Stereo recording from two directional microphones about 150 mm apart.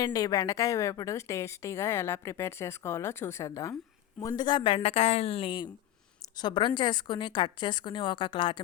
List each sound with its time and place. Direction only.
0.0 s a woman's voice: 25° left (ahead or behind)